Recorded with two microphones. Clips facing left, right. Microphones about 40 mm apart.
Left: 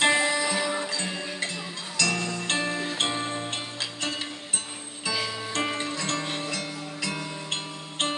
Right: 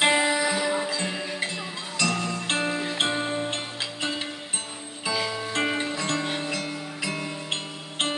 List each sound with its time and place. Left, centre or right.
0.0 s music: centre